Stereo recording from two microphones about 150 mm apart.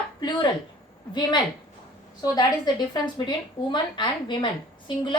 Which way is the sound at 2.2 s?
25° left (ahead or behind).